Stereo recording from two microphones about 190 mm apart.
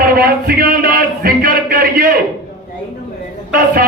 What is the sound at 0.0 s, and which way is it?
A man's voice, 50° right (ahead or behind).